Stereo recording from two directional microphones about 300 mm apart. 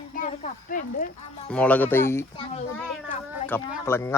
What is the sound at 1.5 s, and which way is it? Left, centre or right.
Speech, centre.